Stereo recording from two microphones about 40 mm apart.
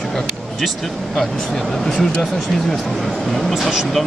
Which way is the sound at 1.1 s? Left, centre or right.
Centre.